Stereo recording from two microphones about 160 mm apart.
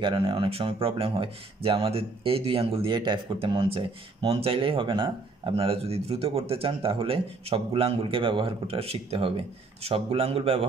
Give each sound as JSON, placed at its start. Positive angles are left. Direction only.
{"t": 0.0, "sound": "speech", "side_deg": -30}